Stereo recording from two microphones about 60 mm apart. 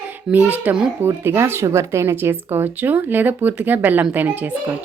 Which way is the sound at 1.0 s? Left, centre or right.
Right.